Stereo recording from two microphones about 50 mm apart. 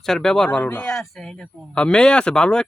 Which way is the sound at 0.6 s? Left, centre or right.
Left.